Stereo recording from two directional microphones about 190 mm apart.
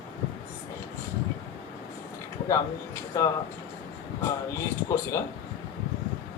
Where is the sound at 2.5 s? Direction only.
15° left (ahead or behind).